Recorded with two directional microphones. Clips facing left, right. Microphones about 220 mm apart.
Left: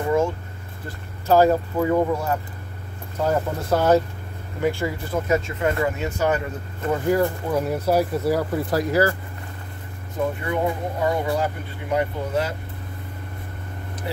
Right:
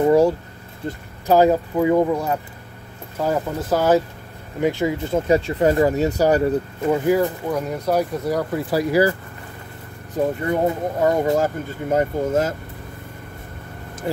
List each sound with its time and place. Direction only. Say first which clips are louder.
0.0 s vehicle: right 6 dB; 35° right (ahead or behind)
0.8 s speech: right 2 dB; 15° right (ahead or behind)
3.3 s speech: right 1 dB; centre (ahead or behind)
4.6 s speech: right 3 dB; 20° right (ahead or behind)
5.3 s speech: right 6 dB; 35° right (ahead or behind)
6.9 s speech: right 2 dB; 5° right (ahead or behind)
8.7 s speech: right 3 dB; 10° right (ahead or behind)
10.1 s speech: right 4 dB; 40° right (ahead or behind)